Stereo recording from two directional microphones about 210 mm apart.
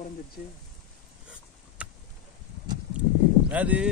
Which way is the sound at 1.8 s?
5° right (ahead or behind).